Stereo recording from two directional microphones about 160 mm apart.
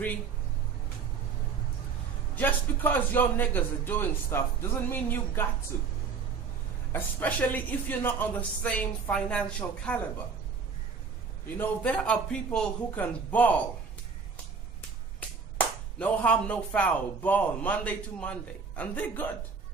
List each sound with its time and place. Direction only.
2.3 s a man's voice: 10° left (ahead or behind)
6.9 s a man's voice: 10° left (ahead or behind)
11.5 s a man's voice: 10° left (ahead or behind)
16.0 s a man's voice: 10° left (ahead or behind)